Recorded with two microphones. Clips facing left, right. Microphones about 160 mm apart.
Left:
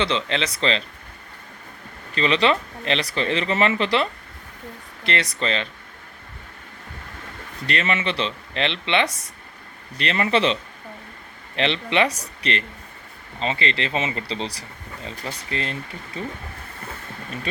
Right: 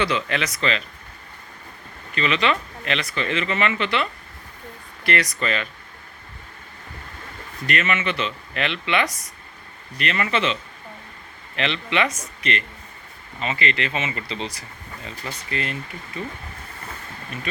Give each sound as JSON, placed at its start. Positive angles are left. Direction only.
{"t": 0.0, "sound": "speech", "side_deg": 25}
{"t": 2.1, "sound": "speech", "side_deg": 35}
{"t": 7.7, "sound": "speech", "side_deg": 30}